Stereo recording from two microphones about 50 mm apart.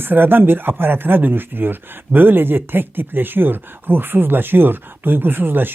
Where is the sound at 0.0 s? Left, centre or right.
Right.